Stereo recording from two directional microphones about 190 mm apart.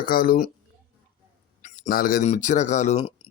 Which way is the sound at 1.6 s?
45° left (ahead or behind).